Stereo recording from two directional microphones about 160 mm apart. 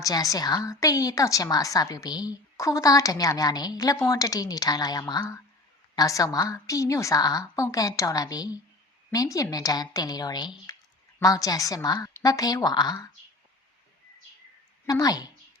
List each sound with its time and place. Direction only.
0.0 s a woman's voice: 20° left (ahead or behind)
14.8 s a woman's voice: 20° left (ahead or behind)